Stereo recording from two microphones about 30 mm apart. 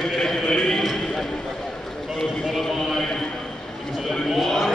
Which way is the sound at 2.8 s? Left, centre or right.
Centre.